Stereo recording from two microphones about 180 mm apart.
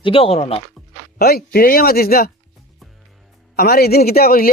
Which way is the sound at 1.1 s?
55° left (ahead or behind).